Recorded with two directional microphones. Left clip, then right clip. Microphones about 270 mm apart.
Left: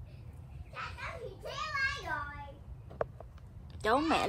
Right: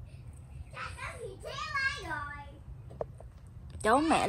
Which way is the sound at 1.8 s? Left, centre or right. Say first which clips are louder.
Right 1 dB; left.